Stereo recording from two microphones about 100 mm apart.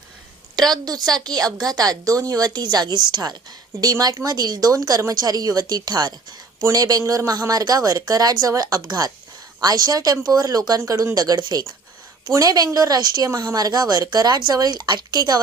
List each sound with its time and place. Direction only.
0.7 s speech: 40° right (ahead or behind)